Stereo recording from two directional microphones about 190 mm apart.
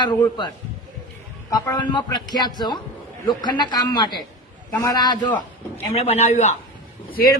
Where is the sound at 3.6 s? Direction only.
20° left (ahead or behind).